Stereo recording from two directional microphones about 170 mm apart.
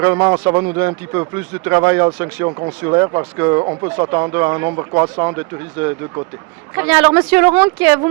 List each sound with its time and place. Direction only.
0.0 s speech: 15° right (ahead or behind)
2.5 s speech: 35° right (ahead or behind)
2.8 s speech: 25° right (ahead or behind)